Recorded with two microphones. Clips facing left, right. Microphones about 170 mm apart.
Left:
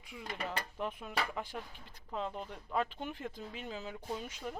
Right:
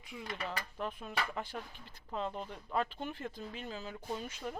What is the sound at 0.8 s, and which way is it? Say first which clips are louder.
Speech: left 1 dB; 5° left (ahead or behind).